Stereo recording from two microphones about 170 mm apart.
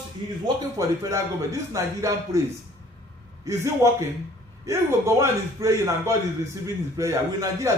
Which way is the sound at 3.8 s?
20° right (ahead or behind).